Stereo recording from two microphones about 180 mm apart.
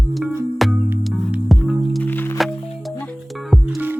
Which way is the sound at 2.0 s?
10° left (ahead or behind).